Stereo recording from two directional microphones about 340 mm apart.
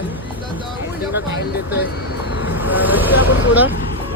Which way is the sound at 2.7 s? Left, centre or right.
Centre.